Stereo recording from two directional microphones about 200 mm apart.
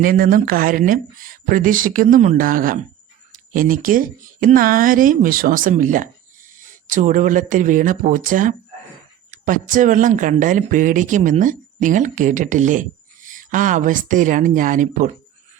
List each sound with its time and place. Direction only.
0.0 s speech: 45° right (ahead or behind)